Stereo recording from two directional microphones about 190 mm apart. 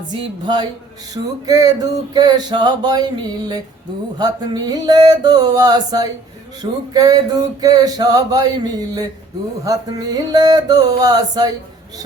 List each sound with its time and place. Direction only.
0.2 s music: 20° right (ahead or behind)
4.2 s music: 20° right (ahead or behind)